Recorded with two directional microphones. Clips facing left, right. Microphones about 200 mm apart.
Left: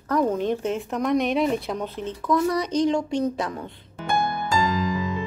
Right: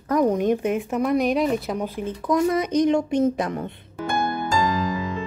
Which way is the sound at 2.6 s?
50° right (ahead or behind).